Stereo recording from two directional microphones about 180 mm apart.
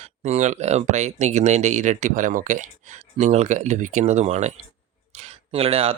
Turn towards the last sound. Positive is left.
turn(degrees=-30)  # may be behind; listen again after turning